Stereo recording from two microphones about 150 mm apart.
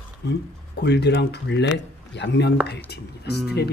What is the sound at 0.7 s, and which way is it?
Speech, 90° left.